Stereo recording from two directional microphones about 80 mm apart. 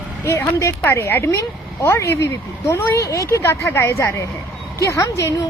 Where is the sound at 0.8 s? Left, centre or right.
Left.